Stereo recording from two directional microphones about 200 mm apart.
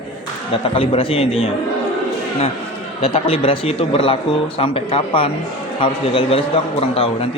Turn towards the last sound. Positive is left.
turn(degrees=30)  # may be behind; listen again after turning